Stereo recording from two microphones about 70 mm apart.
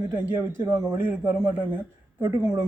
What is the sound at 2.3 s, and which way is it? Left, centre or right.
Speech, right.